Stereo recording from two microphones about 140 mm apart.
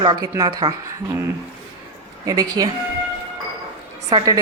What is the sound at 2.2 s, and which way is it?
Speech, 25° right (ahead or behind).